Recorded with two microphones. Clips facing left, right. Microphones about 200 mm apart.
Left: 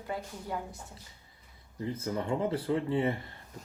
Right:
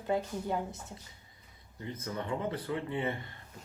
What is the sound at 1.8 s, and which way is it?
Speech, 30° left (ahead or behind).